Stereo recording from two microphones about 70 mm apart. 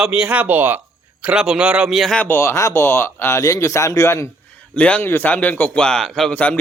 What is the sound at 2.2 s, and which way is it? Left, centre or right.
Speech, left.